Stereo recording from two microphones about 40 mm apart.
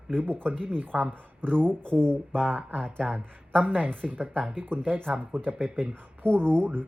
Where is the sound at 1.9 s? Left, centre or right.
Right.